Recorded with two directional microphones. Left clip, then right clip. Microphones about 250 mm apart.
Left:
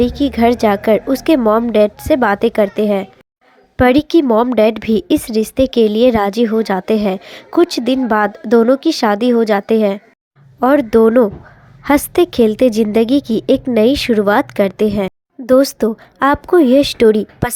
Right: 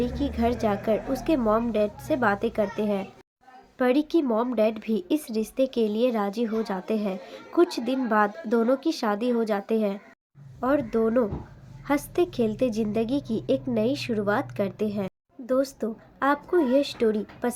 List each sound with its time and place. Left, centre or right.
0.0 s a woman's voice: left